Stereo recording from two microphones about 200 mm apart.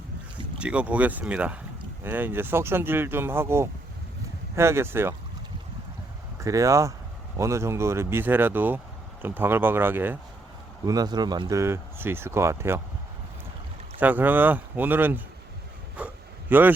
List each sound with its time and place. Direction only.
0.6 s speech: 5° right (ahead or behind)
6.4 s speech: 15° right (ahead or behind)
14.0 s speech: 10° right (ahead or behind)
16.0 s a sound: 10° right (ahead or behind)